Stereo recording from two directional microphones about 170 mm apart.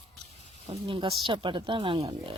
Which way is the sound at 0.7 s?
35° right (ahead or behind).